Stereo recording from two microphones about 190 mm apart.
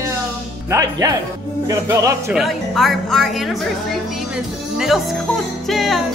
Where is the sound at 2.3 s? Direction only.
Centre (ahead or behind).